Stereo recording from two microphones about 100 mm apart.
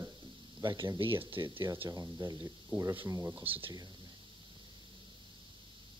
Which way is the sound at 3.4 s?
65° right (ahead or behind).